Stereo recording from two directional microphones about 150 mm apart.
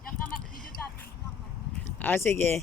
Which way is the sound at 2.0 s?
15° left (ahead or behind).